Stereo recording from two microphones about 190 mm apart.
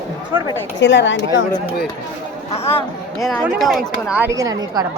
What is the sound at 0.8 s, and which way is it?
Speech, 75° left (ahead or behind).